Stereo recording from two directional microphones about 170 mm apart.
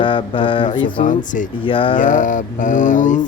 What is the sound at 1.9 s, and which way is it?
Mantra, 50° left (ahead or behind).